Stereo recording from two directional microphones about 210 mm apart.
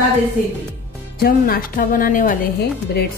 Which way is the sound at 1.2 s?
45° left (ahead or behind).